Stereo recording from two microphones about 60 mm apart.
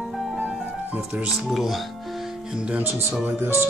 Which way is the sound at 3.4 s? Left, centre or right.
Right.